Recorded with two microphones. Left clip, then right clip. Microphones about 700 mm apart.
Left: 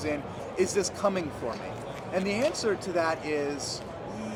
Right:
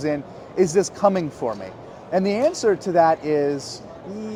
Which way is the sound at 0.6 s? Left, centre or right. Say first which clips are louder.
Right 9 dB; right.